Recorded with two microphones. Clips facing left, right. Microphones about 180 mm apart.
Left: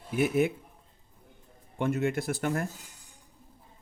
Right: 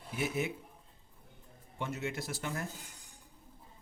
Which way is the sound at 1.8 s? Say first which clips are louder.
Left 10 dB; 55° left (ahead or behind).